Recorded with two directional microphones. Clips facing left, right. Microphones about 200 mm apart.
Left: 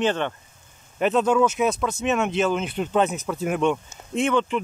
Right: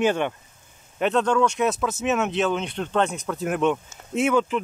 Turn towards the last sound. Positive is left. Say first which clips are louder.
# right 1 dB
turn(degrees=-5)  # may be behind; listen again after turning